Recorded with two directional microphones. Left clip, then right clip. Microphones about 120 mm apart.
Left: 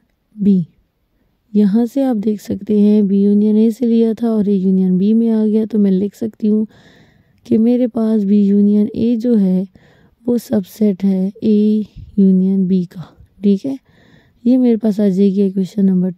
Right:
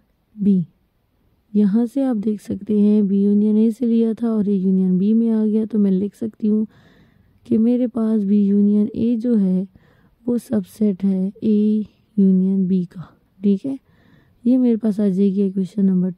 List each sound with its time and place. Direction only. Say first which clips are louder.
0.4 s a woman's voice: left 4 dB; 35° left (ahead or behind)